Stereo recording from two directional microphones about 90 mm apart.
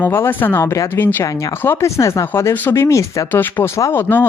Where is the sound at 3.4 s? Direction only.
20° left (ahead or behind).